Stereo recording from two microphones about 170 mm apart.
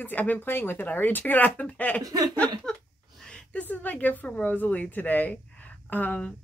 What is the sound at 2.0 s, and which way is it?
Speech, 20° right (ahead or behind).